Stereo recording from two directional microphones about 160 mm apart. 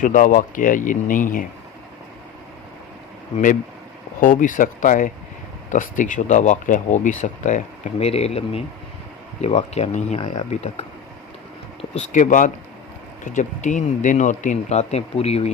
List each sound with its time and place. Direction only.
0.0 s speech: 55° left (ahead or behind)
3.3 s speech: 55° left (ahead or behind); by 15.5 s 40° left (ahead or behind)